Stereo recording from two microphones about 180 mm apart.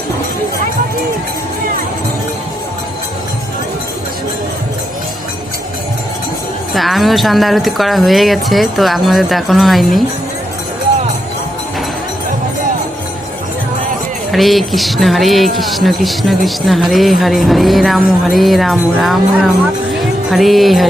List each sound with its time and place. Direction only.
6.7 s speech: centre (ahead or behind)
14.3 s speech: centre (ahead or behind)
19.9 s music: centre (ahead or behind)